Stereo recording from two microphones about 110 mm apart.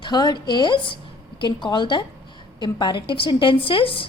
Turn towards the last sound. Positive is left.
turn(degrees=55)  # may be behind; listen again after turning